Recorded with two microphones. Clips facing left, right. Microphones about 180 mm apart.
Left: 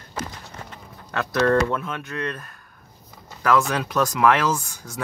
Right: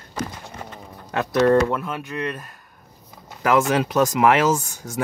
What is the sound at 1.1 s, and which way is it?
Speech, 15° right (ahead or behind).